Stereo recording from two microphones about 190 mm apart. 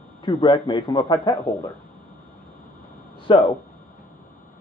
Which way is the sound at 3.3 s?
25° left (ahead or behind).